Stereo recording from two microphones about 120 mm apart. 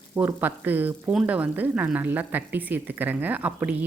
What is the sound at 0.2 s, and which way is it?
A woman's voice, 20° right (ahead or behind).